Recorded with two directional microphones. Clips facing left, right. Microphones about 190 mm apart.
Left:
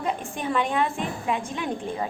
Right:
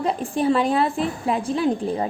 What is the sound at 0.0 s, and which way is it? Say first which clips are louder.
A woman's voice: right 7 dB; 35° right (ahead or behind).